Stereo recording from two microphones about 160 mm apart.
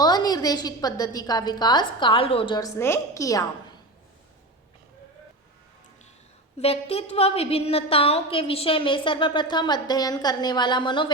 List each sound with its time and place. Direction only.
0.0 s a woman's voice: 25° left (ahead or behind)
2.6 s a woman's voice: 20° left (ahead or behind)
6.6 s a woman's voice: 40° left (ahead or behind)